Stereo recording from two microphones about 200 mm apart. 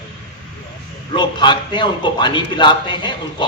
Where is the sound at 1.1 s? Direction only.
20° left (ahead or behind).